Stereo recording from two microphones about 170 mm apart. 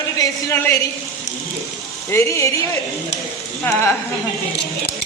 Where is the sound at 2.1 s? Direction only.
15° left (ahead or behind).